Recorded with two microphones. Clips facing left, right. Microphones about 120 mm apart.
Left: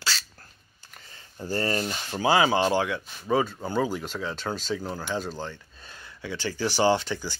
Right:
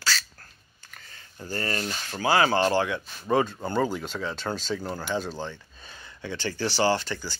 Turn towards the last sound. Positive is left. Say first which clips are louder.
# left 2 dB
turn(degrees=20)  # may be behind; listen again after turning